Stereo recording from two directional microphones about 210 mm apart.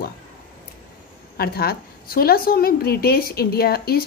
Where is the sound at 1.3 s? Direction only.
45° left (ahead or behind).